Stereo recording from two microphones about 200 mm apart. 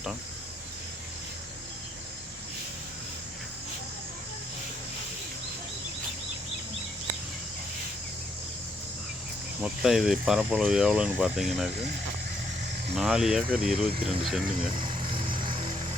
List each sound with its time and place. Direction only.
9.6 s speech: centre (ahead or behind)
13.0 s speech: centre (ahead or behind)
14.8 s vehicle: 25° right (ahead or behind)